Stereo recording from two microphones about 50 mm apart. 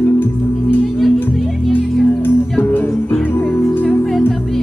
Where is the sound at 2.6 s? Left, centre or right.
Left.